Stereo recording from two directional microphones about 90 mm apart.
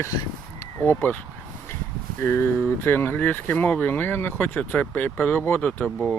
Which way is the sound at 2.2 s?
25° left (ahead or behind).